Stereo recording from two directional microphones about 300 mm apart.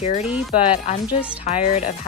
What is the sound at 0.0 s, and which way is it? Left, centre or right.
Speech, left.